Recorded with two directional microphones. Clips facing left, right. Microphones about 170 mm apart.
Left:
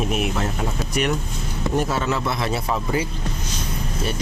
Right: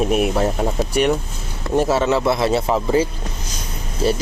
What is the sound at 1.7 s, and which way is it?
Speech, 30° right (ahead or behind).